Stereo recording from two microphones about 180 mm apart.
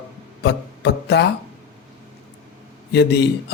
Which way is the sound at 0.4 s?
70° left (ahead or behind).